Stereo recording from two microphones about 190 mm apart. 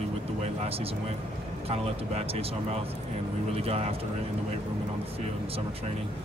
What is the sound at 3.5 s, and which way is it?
Speech, 30° right (ahead or behind).